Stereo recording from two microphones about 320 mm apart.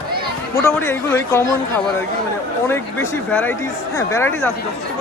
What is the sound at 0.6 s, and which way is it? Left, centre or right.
Speech, centre.